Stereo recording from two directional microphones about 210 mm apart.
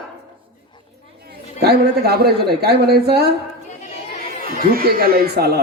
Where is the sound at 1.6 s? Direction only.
50° right (ahead or behind).